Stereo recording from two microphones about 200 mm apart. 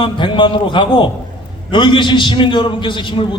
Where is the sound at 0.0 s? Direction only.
25° left (ahead or behind).